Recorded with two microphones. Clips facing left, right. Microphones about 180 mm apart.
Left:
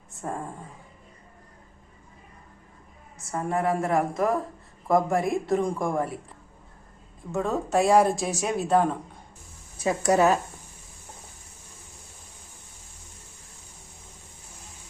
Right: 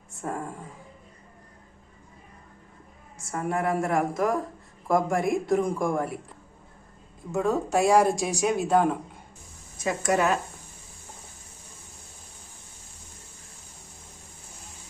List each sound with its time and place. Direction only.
0.1 s speech: centre (ahead or behind)
3.2 s speech: centre (ahead or behind)
7.3 s speech: centre (ahead or behind)
9.7 s speech: 35° left (ahead or behind)